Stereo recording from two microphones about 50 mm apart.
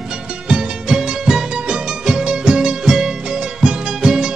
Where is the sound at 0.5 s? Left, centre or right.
Centre.